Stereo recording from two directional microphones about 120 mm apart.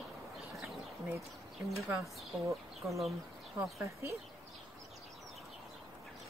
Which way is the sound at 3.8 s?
25° right (ahead or behind).